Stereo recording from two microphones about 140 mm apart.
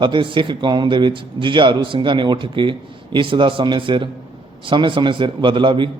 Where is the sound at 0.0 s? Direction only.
35° right (ahead or behind).